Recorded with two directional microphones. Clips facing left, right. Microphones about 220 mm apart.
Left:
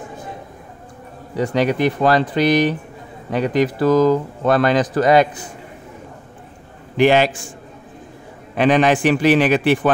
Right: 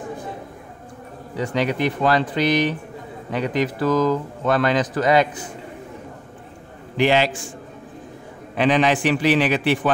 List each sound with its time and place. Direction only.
1.4 s speech: 40° left (ahead or behind)
7.0 s a man's voice: 50° left (ahead or behind)
8.5 s a man's voice: 50° left (ahead or behind)